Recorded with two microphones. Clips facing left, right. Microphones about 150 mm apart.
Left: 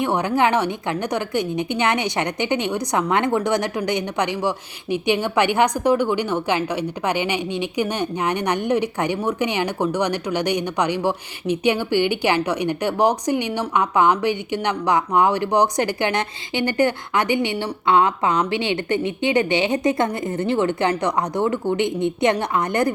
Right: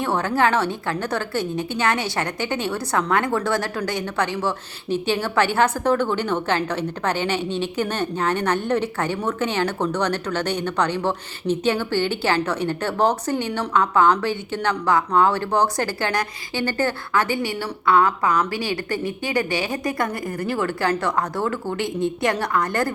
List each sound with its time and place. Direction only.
0.0 s a woman's voice: 15° left (ahead or behind)